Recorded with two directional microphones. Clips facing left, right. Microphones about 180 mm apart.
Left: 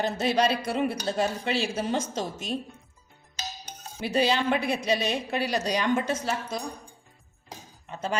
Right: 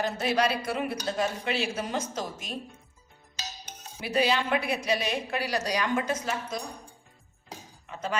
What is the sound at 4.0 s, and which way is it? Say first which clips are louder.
Speech: left 1 dB; 30° left (ahead or behind).